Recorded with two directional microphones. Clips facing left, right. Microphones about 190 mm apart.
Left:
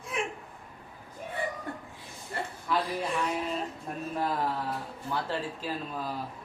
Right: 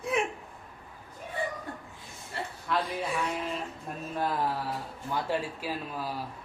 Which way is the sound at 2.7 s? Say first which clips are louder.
Left 1 dB; 5° right (ahead or behind).